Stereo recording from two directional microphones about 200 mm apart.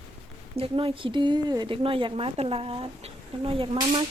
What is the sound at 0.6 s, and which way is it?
Speech, 25° right (ahead or behind).